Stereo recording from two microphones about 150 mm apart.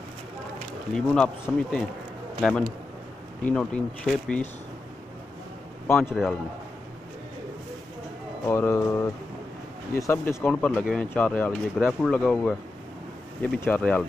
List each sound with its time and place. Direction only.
0.9 s speech: 5° left (ahead or behind)
5.9 s a man's voice: 15° left (ahead or behind)
8.5 s speech: 15° left (ahead or behind)